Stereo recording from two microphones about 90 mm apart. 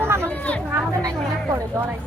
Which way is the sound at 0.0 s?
30° right (ahead or behind).